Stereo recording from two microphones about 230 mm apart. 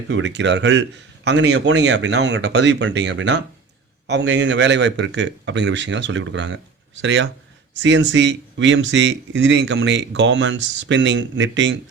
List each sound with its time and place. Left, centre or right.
0.1 s speech: right